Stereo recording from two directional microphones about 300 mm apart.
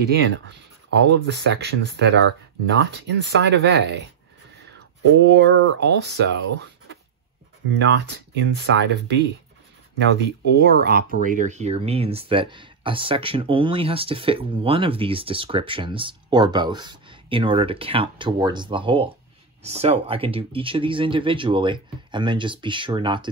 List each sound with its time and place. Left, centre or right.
0.2 s speech: right
5.0 s speech: right
8.1 s speech: right
10.1 s speech: right; by 23.3 s centre